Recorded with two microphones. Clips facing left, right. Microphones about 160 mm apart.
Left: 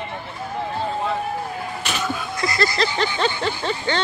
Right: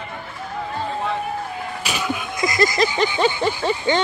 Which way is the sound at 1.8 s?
10° right (ahead or behind).